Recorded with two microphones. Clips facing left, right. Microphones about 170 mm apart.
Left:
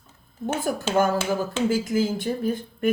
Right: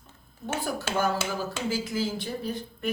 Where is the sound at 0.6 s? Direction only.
50° left (ahead or behind).